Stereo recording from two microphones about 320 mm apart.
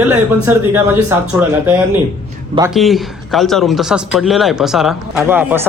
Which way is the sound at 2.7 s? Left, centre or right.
Centre.